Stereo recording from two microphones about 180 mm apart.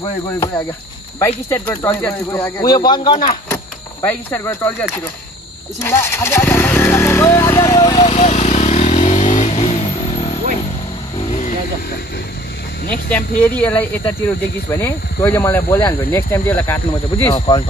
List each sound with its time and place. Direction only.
1.2 s speech: 15° left (ahead or behind)
3.4 s a sound: 10° left (ahead or behind)
5.8 s speech: 15° left (ahead or behind)
8.1 s vehicle: 40° left (ahead or behind)
12.9 s speech: 10° left (ahead or behind)
17.3 s speech: 25° left (ahead or behind)